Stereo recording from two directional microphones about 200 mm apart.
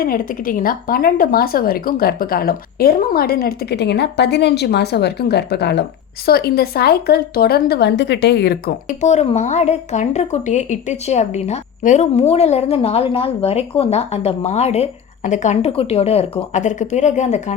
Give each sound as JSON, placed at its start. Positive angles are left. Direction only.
{"t": 0.0, "sound": "speech", "side_deg": 45}